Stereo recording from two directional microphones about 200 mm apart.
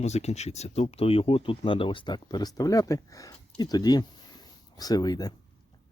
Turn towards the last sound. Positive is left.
turn(degrees=20)  # may be behind; listen again after turning